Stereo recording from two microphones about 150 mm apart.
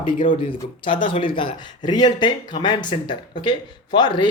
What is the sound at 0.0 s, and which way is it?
Speech, 35° left (ahead or behind).